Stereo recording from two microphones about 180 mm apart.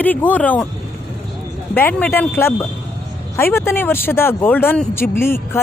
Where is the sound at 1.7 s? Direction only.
10° left (ahead or behind).